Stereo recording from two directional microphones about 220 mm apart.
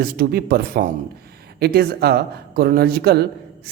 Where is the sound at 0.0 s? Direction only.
45° right (ahead or behind).